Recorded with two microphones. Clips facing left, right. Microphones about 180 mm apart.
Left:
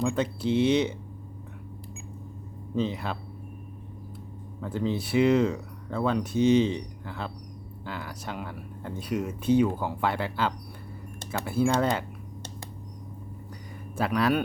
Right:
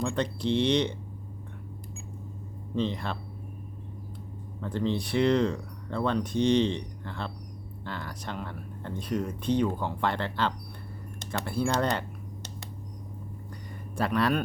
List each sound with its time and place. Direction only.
0.0 s speech: 5° left (ahead or behind)
2.7 s speech: 5° left (ahead or behind)
4.6 s speech: 5° left (ahead or behind)
13.9 s speech: 5° left (ahead or behind)